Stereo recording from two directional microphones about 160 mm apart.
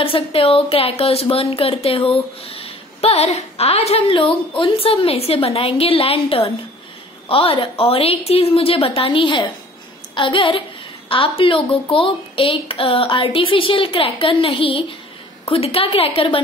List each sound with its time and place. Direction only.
0.0 s a woman's voice: 35° left (ahead or behind)